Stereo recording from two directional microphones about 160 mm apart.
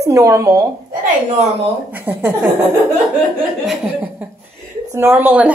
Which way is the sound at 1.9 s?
10° right (ahead or behind).